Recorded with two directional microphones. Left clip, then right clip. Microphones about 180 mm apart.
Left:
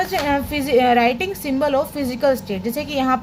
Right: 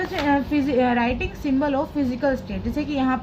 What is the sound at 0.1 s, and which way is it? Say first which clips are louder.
A woman's voice: left 2 dB; 55° left (ahead or behind).